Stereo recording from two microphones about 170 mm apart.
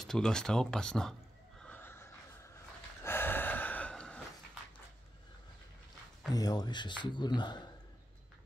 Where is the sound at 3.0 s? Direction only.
15° left (ahead or behind).